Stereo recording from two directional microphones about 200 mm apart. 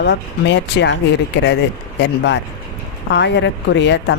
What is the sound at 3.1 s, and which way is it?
Speech, 60° left (ahead or behind).